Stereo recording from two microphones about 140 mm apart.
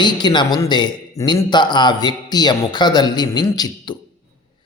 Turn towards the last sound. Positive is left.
turn(degrees=30)  # may be behind; listen again after turning